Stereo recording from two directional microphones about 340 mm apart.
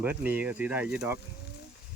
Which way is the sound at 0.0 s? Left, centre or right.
Centre.